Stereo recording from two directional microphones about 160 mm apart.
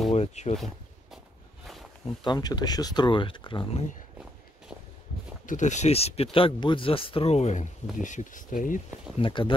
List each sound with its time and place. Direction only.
0.1 s speech: 45° left (ahead or behind)
2.2 s speech: 25° left (ahead or behind)
5.5 s speech: 50° left (ahead or behind)
9.2 s speech: 30° left (ahead or behind)